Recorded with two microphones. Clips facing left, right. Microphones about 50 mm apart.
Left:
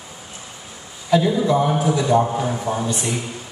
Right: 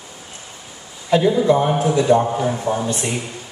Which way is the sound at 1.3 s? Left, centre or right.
Right.